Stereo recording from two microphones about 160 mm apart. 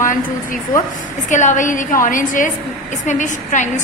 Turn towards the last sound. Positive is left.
turn(degrees=50)  # may be behind; listen again after turning